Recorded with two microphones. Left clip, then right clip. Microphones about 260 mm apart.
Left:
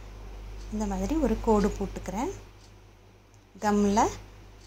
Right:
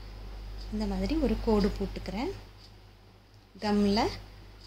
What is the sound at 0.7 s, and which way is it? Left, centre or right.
A woman's voice, centre.